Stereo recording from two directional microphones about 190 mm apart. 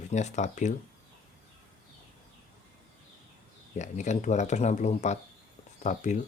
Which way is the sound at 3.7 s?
40° left (ahead or behind).